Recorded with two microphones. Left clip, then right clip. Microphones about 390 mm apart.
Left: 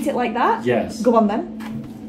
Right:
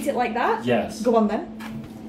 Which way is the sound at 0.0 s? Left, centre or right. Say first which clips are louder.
Left 3 dB; centre.